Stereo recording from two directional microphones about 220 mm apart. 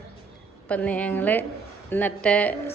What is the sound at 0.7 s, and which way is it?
A woman's voice, 5° left (ahead or behind).